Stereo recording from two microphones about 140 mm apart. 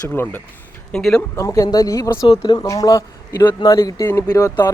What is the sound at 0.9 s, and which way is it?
Speech, 5° left (ahead or behind).